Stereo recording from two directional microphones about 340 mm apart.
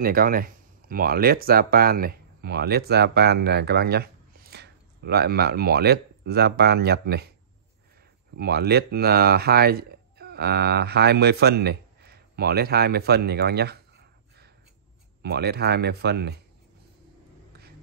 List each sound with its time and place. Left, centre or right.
0.0 s speech: right
8.4 s speech: right
17.5 s a sound: right